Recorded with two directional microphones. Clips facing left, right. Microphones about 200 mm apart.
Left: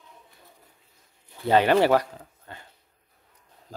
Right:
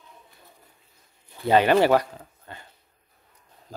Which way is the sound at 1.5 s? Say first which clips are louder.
Right 1 dB; 15° right (ahead or behind).